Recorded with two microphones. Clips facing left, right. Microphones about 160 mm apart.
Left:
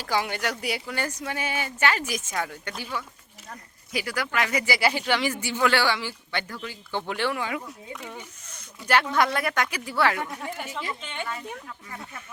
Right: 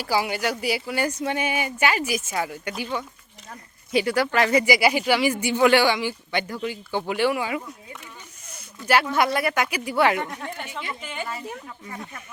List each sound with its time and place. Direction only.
0.0 s speech: 5° right (ahead or behind)
1.1 s speech: 20° right (ahead or behind)
3.9 s speech: 25° right (ahead or behind)
4.6 s speech: 15° right (ahead or behind)
8.9 s speech: 10° right (ahead or behind)
10.2 s speech: 5° left (ahead or behind)